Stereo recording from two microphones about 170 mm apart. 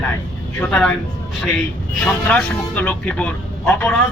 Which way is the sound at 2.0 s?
10° left (ahead or behind).